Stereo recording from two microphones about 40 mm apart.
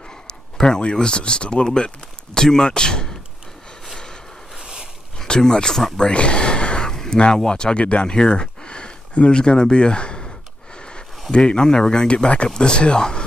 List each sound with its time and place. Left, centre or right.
0.3 s speech: centre
4.6 s a sound: centre
5.2 s speech: centre
5.9 s a sound: left
7.4 s speech: left
11.3 s speech: left